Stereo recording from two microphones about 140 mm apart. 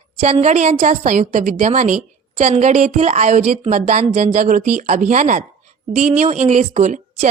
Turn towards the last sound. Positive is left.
turn(degrees=-60)  # may be behind; listen again after turning